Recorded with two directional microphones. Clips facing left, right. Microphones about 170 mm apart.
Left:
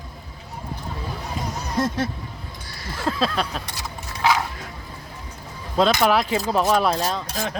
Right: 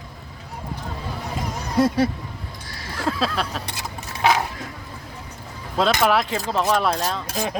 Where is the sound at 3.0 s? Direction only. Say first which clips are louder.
Even; centre (ahead or behind).